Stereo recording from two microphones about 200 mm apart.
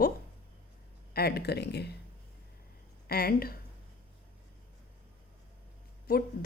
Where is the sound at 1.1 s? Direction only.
50° left (ahead or behind).